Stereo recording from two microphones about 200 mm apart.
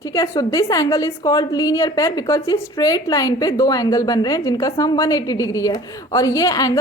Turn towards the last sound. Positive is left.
turn(degrees=20)  # may be behind; listen again after turning